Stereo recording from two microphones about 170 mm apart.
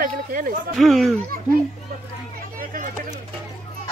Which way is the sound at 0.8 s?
Centre (ahead or behind).